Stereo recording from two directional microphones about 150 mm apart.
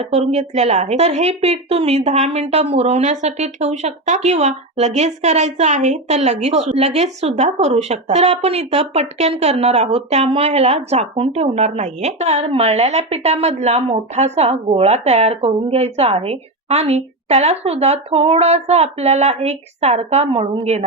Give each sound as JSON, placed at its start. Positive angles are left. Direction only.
{"t": 0.0, "sound": "a woman's voice", "side_deg": -45}